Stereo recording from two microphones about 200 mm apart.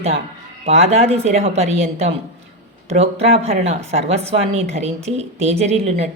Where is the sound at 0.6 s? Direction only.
30° right (ahead or behind).